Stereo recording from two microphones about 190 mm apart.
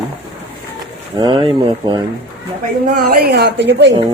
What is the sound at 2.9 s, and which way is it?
Speech, 50° right (ahead or behind).